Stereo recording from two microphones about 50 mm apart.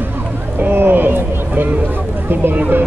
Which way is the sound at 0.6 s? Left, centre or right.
Right.